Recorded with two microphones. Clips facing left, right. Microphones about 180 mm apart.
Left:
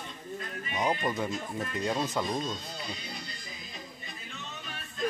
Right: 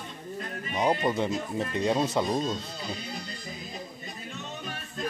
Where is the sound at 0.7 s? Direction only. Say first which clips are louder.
Right 4 dB; 35° right (ahead or behind).